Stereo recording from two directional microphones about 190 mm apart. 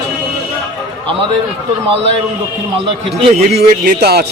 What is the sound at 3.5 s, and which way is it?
Speech, 50° right (ahead or behind).